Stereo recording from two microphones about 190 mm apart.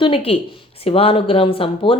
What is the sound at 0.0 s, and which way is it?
Speech, 30° left (ahead or behind).